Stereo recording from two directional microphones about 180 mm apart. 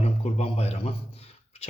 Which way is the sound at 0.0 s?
35° left (ahead or behind).